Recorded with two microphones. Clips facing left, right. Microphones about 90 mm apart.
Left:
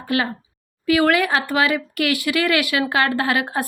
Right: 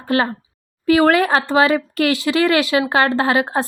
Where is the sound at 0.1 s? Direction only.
35° right (ahead or behind).